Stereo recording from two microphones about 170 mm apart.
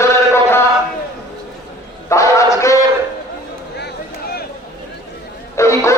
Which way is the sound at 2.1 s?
20° left (ahead or behind).